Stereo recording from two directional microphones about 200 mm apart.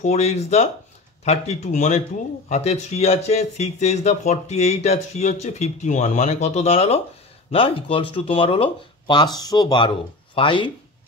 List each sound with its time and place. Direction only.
0.0 s speech: 35° left (ahead or behind)